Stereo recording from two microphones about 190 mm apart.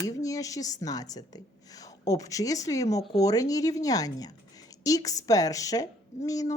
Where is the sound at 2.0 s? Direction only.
15° left (ahead or behind).